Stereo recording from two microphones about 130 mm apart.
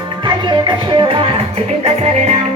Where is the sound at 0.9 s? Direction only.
40° right (ahead or behind).